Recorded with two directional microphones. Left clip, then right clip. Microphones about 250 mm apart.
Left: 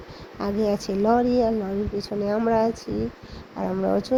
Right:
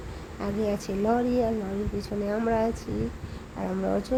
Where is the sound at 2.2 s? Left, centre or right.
Centre.